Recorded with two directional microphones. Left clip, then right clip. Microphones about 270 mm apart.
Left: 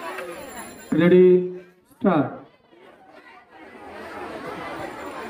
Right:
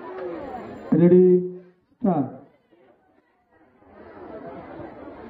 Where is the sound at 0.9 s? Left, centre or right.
Right.